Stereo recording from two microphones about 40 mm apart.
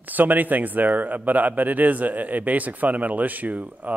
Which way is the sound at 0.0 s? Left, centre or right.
Right.